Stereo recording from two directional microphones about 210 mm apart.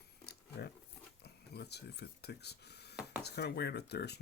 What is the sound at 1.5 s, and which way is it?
Speech, 50° left (ahead or behind).